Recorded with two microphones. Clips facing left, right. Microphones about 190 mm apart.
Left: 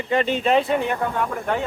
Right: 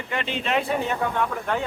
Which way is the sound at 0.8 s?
5° left (ahead or behind).